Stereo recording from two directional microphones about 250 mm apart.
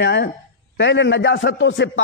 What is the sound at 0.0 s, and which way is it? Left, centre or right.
Speech, left.